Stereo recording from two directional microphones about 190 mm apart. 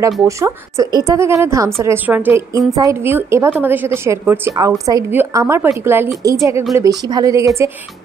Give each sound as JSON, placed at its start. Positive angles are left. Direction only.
{"t": 0.2, "sound": "a woman's voice", "side_deg": -15}